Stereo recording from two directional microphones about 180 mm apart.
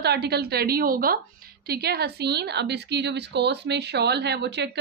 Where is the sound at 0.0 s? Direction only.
65° right (ahead or behind).